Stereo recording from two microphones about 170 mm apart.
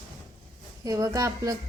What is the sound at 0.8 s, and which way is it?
Speech, 20° right (ahead or behind).